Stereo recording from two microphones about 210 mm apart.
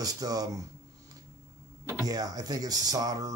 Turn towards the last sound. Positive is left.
turn(degrees=-15)  # may be behind; listen again after turning